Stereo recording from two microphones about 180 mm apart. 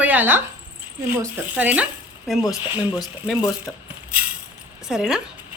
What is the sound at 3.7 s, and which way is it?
Speech, centre (ahead or behind).